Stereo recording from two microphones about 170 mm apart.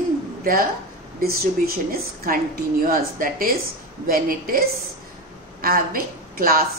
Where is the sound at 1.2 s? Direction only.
60° right (ahead or behind).